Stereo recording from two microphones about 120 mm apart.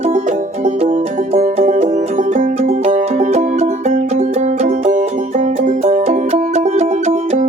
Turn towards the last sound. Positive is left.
turn(degrees=-75)  # may be behind; listen again after turning